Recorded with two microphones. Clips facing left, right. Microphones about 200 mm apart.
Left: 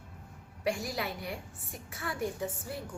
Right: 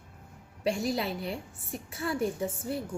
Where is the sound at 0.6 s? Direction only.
25° right (ahead or behind).